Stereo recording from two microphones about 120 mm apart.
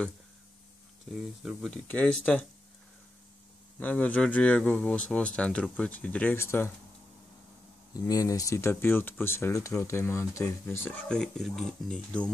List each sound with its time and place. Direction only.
1.4 s speech: centre (ahead or behind)
1.9 s speech: 10° left (ahead or behind)
3.8 s speech: 10° left (ahead or behind)
7.9 s speech: 30° left (ahead or behind); by 12.3 s 10° left (ahead or behind)